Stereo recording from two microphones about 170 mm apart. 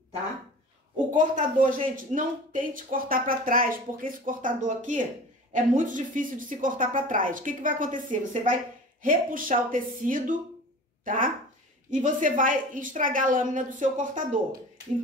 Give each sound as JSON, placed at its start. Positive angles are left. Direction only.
{"t": 1.1, "sound": "speech", "side_deg": -50}